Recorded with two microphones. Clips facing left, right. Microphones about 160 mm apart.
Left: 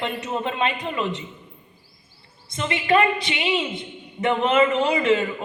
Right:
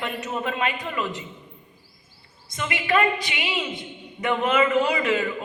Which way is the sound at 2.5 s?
30° left (ahead or behind).